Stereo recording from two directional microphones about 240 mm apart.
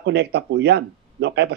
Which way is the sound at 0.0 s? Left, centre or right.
Right.